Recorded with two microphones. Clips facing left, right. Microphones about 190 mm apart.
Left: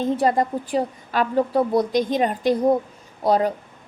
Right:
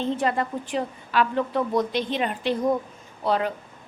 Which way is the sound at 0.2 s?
35° left (ahead or behind).